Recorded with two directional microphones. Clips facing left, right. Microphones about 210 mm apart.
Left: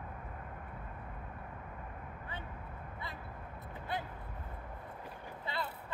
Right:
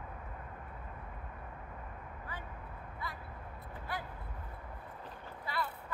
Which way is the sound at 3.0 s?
25° left (ahead or behind).